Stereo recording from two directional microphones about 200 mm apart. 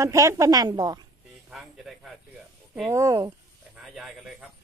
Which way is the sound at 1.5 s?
Centre (ahead or behind).